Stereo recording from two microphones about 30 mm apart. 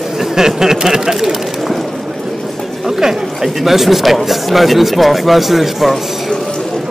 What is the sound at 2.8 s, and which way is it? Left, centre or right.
Speech, centre.